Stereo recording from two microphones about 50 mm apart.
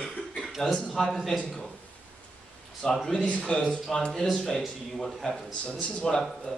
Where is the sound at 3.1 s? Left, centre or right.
Left.